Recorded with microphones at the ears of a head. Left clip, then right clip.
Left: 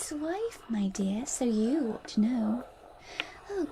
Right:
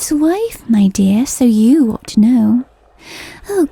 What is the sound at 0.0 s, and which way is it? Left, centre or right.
Speech, right.